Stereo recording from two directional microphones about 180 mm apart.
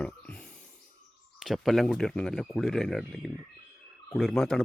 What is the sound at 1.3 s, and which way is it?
Speech, centre (ahead or behind).